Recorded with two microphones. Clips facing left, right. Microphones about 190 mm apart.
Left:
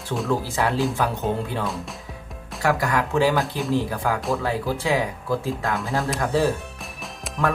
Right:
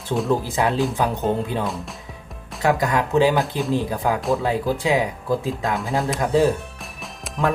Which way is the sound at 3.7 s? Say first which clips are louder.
Right 1 dB; 20° right (ahead or behind).